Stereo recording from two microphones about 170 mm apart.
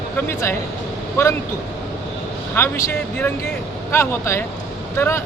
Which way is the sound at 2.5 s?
15° left (ahead or behind).